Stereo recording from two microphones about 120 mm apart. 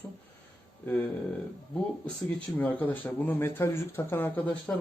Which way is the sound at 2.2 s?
15° left (ahead or behind).